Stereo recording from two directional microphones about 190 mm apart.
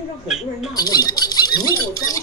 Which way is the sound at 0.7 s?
20° left (ahead or behind).